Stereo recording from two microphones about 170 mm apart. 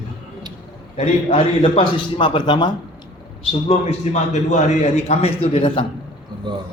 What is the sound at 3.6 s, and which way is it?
A man's voice, 40° left (ahead or behind).